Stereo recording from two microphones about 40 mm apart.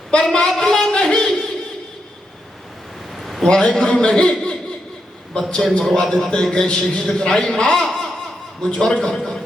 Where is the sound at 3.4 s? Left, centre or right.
Centre.